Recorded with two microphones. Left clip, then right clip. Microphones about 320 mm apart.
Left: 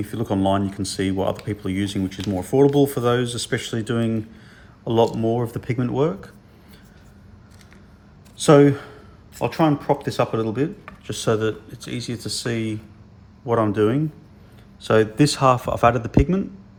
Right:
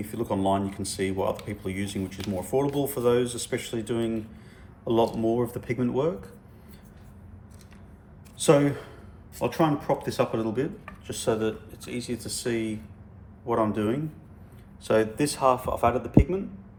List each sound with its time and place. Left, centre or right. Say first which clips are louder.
0.0 s speech: left 5 dB; left
8.4 s speech: left 7 dB; left